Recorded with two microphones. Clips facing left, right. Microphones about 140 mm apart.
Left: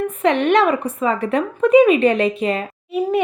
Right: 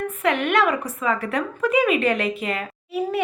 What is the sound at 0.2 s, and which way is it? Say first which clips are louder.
A woman's voice: left 5 dB; 30° left (ahead or behind).